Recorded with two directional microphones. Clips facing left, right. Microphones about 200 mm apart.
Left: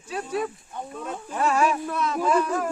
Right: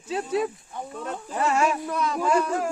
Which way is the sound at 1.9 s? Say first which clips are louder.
Even; 5° left (ahead or behind).